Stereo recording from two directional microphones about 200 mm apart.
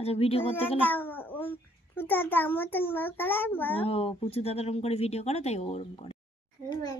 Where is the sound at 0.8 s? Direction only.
10° left (ahead or behind).